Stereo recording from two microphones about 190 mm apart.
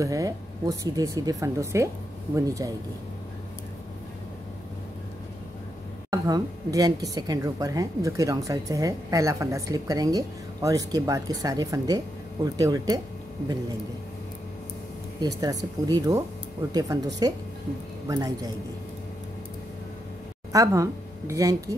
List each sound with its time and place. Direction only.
0.0 s a woman's voice: 15° right (ahead or behind)
6.0 s a woman's voice: 20° right (ahead or behind)
15.1 s speech: 20° right (ahead or behind)
20.5 s a woman's voice: 15° right (ahead or behind)